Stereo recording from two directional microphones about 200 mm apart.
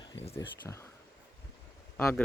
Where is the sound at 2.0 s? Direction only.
15° left (ahead or behind).